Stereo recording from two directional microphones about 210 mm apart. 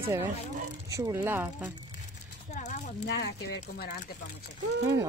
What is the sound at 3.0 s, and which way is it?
Speech, 55° left (ahead or behind).